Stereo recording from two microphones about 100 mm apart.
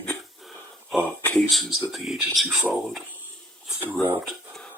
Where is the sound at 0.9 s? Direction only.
10° left (ahead or behind).